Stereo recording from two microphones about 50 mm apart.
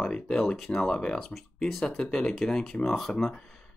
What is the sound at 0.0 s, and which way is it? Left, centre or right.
Speech, centre.